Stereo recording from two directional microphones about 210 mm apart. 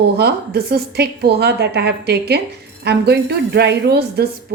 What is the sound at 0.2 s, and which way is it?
Speech, 50° right (ahead or behind).